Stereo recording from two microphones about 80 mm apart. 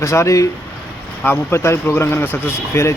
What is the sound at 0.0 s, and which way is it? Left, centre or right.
Speech, left.